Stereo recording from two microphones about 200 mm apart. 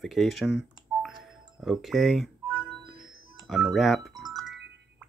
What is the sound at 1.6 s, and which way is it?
Speech, centre (ahead or behind).